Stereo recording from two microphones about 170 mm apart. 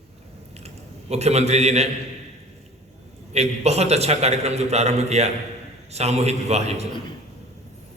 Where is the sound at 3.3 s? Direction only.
40° right (ahead or behind).